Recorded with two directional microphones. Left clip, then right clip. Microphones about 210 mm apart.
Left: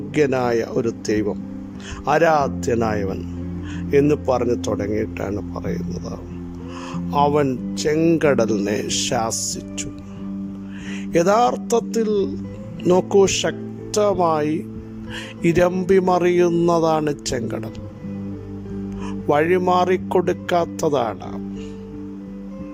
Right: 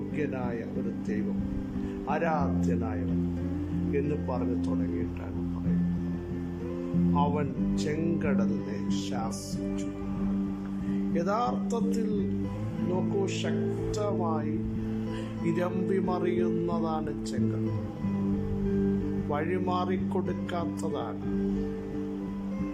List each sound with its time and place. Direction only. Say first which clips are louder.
0.2 s speech: left 16 dB; 55° left (ahead or behind)
7.1 s speech: left 14 dB; 55° left (ahead or behind)
11.1 s speech: left 14 dB; 50° left (ahead or behind)
19.3 s speech: left 15 dB; 45° left (ahead or behind)